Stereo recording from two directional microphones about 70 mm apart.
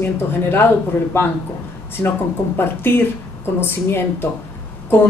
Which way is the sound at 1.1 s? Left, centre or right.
Left.